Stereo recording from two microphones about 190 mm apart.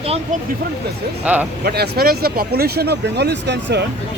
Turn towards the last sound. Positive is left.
turn(degrees=-65)  # may be behind; listen again after turning